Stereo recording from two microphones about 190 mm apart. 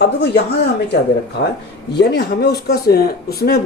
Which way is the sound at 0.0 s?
65° left (ahead or behind).